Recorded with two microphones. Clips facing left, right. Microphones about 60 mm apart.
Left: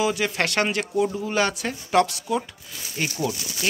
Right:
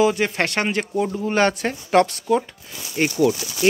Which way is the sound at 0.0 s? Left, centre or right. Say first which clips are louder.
Right 4 dB; right.